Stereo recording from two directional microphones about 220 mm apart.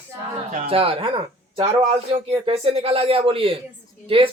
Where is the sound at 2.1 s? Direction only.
25° right (ahead or behind).